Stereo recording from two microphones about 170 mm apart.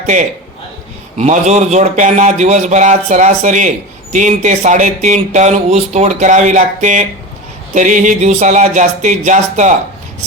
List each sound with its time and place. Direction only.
0.0 s a man's voice: 45° right (ahead or behind)